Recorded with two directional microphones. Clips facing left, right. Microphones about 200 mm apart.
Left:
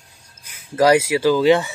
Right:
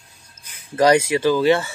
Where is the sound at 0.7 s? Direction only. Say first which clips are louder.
Left 1 dB; 5° left (ahead or behind).